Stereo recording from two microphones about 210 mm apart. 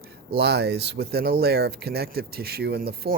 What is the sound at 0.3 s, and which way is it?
Speech, 50° right (ahead or behind).